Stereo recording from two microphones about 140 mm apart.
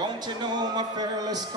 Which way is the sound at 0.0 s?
30° right (ahead or behind).